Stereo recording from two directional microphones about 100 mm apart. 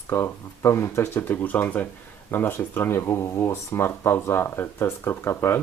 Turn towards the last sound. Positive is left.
turn(degrees=25)  # may be behind; listen again after turning